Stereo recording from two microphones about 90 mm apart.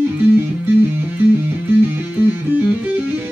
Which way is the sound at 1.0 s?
25° right (ahead or behind).